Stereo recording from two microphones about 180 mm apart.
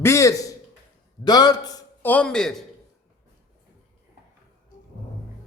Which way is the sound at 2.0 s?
5° left (ahead or behind).